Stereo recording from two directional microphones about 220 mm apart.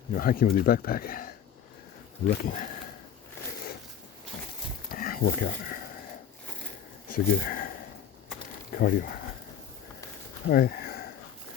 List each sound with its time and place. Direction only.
0.1 s speech: 40° left (ahead or behind)
4.9 s a sound: 40° left (ahead or behind)
7.1 s speech: 40° left (ahead or behind)
8.7 s speech: 40° left (ahead or behind)
10.5 s speech: 45° left (ahead or behind)